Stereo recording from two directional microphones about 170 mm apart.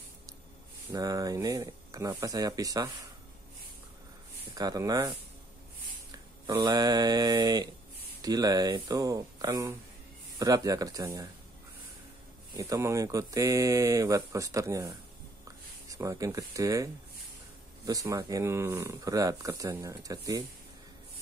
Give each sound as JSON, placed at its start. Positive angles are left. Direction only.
{"t": 0.9, "sound": "speech", "side_deg": -20}
{"t": 4.6, "sound": "speech", "side_deg": -20}
{"t": 6.1, "sound": "mantra", "side_deg": -25}
{"t": 8.2, "sound": "speech", "side_deg": -20}
{"t": 12.5, "sound": "speech", "side_deg": -20}